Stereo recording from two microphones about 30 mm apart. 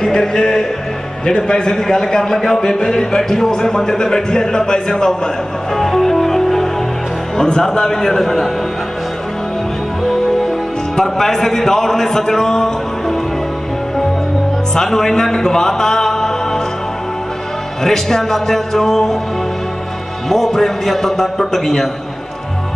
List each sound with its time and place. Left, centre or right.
0.0 s music: left
1.2 s a man's voice: left
5.8 s music: centre
7.7 s speech: left
10.0 s music: centre
11.0 s speech: centre
14.8 s a man's voice: centre
17.8 s speech: centre
20.2 s speech: centre